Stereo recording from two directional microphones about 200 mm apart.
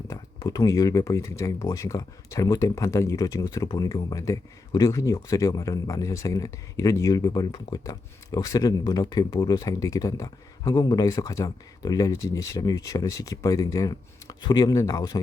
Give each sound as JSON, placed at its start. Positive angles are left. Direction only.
{"t": 0.1, "sound": "speech", "side_deg": 20}